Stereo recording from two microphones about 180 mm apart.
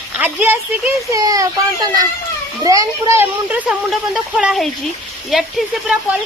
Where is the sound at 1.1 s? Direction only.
20° right (ahead or behind); by 5.5 s centre (ahead or behind).